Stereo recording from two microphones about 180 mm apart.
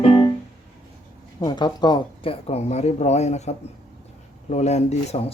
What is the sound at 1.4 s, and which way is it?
Speech, 25° left (ahead or behind).